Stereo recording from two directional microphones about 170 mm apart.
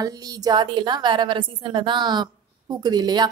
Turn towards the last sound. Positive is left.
turn(degrees=-25)  # may be behind; listen again after turning